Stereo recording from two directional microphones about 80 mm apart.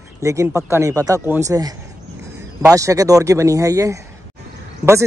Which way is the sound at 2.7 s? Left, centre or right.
Right.